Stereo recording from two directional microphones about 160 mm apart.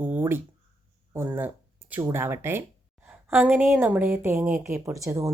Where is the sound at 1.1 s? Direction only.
15° right (ahead or behind).